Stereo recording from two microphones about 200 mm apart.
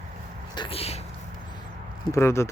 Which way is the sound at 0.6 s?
30° left (ahead or behind).